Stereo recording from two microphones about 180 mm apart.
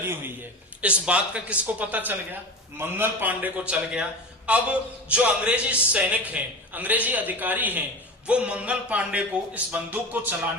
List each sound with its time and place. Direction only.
0.8 s speech: 5° right (ahead or behind)